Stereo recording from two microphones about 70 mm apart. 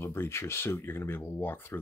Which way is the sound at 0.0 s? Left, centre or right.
Left.